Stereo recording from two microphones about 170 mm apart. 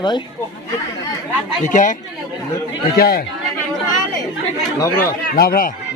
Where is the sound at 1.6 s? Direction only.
50° left (ahead or behind).